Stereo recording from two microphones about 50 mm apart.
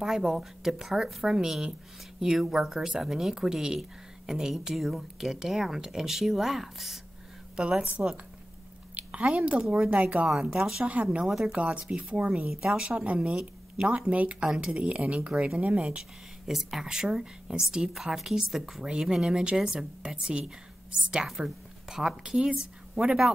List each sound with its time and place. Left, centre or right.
0.0 s a woman's voice: centre
4.7 s speech: centre
7.5 s a woman's voice: centre
8.9 s a woman's voice: right
11.2 s a woman's voice: centre
11.5 s a woman's voice: right
11.8 s a woman's voice: centre
12.1 s a woman's voice: right
12.4 s a woman's voice: centre
12.8 s speech: right
14.4 s a woman's voice: centre
16.4 s a woman's voice: centre